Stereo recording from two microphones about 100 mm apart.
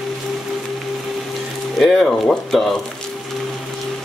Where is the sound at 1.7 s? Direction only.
Centre (ahead or behind).